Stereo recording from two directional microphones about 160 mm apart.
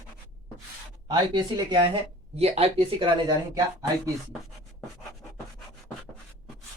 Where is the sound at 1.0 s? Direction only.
30° right (ahead or behind).